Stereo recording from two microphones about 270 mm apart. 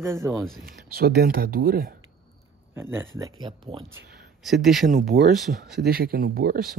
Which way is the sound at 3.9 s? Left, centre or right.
Centre.